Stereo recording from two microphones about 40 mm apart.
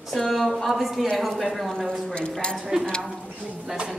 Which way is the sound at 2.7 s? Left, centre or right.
Centre.